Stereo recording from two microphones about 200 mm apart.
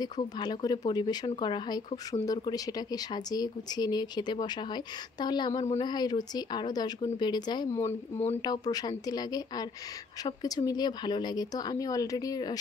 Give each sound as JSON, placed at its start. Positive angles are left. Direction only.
{"t": 0.0, "sound": "speech", "side_deg": 20}